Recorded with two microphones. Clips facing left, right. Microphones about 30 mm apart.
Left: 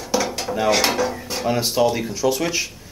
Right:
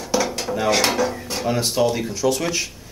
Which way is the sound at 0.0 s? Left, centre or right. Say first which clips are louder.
Even; centre.